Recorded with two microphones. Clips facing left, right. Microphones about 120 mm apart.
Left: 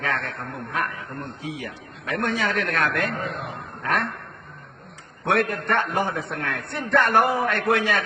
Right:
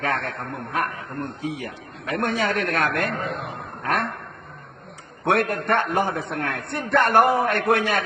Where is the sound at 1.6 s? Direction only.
45° right (ahead or behind).